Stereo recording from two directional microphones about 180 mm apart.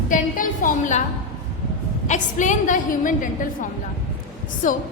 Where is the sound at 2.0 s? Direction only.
45° left (ahead or behind).